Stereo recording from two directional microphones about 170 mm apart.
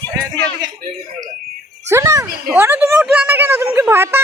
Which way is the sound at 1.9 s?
20° right (ahead or behind).